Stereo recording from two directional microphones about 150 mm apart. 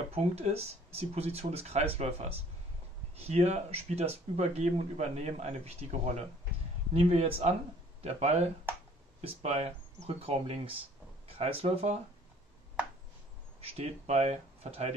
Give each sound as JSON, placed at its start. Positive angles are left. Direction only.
{"t": 0.1, "sound": "speech", "side_deg": -45}
{"t": 13.6, "sound": "speech", "side_deg": -40}